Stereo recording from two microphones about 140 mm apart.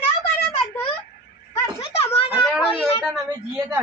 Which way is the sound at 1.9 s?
45° left (ahead or behind).